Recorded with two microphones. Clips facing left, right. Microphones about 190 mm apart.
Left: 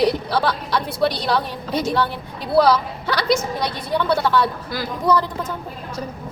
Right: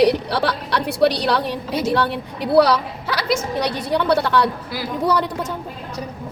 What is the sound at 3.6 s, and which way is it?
Speech, 70° right (ahead or behind).